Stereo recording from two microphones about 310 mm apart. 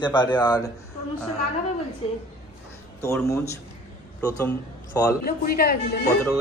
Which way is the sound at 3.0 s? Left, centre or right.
Centre.